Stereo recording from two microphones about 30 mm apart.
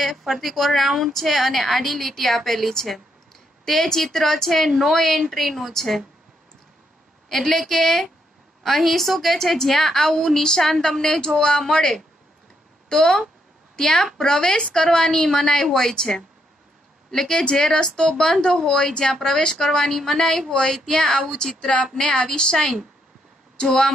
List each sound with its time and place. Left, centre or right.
0.0 s a woman's voice: centre
7.2 s a woman's voice: centre; by 22.7 s left